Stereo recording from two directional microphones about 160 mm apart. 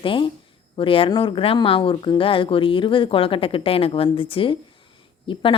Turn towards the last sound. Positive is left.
turn(degrees=35)  # may be behind; listen again after turning